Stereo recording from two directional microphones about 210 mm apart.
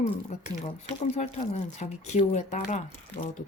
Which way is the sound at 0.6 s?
30° left (ahead or behind).